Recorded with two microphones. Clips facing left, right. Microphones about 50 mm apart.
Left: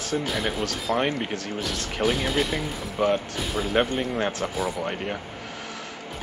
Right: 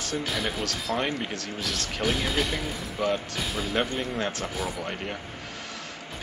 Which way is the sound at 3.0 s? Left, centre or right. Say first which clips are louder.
Left 4 dB; left.